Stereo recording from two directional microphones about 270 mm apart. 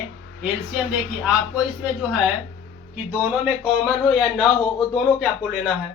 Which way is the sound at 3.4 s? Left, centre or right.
Centre.